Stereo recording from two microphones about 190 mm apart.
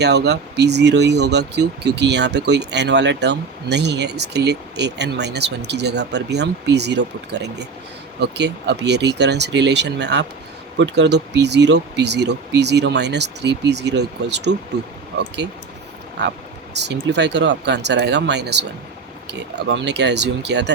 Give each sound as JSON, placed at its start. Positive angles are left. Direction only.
{"t": 0.0, "sound": "speech", "side_deg": -60}
{"t": 16.2, "sound": "speech", "side_deg": -60}